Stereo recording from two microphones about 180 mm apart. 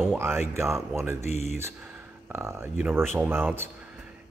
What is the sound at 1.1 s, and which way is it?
Speech, 40° left (ahead or behind).